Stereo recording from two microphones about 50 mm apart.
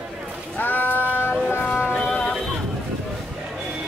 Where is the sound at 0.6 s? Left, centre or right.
Left.